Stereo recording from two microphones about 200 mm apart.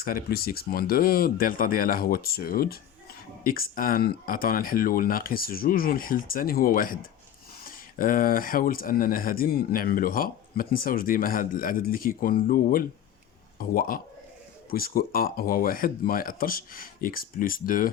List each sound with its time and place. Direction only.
0.0 s speech: 50° left (ahead or behind)